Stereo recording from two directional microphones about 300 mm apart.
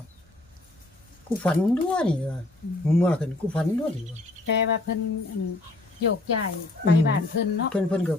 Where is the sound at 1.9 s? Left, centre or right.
Centre.